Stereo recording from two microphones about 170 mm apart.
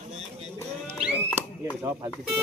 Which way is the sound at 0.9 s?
5° right (ahead or behind).